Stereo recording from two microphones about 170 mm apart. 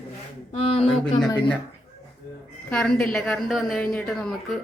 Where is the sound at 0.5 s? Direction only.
35° left (ahead or behind).